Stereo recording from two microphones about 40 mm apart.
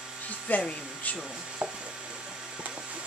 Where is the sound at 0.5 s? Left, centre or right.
Left.